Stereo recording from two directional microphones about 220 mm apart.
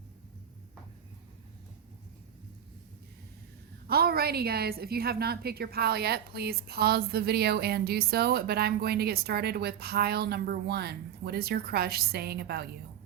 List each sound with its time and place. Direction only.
3.8 s a woman's voice: 45° right (ahead or behind)